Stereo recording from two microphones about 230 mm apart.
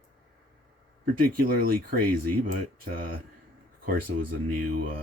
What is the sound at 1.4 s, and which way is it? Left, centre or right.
Speech, right.